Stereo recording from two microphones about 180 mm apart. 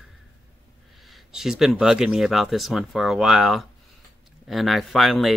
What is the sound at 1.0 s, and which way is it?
Speech, centre (ahead or behind).